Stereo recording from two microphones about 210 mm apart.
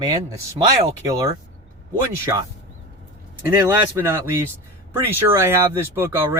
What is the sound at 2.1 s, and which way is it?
Speech, 15° right (ahead or behind).